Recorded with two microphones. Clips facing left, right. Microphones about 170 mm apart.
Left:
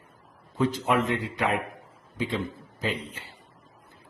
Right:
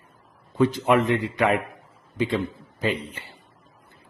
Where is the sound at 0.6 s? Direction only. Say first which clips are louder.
Right 5 dB; 65° right (ahead or behind).